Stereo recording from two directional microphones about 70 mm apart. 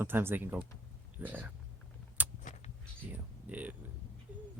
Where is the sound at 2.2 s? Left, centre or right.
Right.